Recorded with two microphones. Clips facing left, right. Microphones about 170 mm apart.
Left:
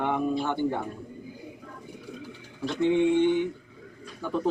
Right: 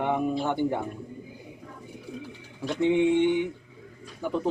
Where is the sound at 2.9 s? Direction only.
20° right (ahead or behind).